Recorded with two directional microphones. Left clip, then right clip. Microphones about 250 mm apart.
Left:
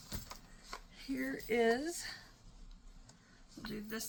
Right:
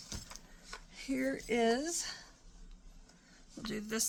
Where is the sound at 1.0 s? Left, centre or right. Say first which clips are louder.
Right 5 dB; right.